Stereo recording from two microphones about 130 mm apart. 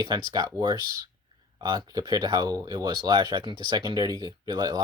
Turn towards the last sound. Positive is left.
turn(degrees=-30)  # may be behind; listen again after turning